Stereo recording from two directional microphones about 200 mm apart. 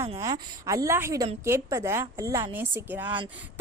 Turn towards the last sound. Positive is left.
turn(degrees=-10)  # may be behind; listen again after turning